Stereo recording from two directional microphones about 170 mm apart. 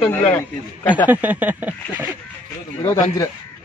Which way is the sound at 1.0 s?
10° right (ahead or behind).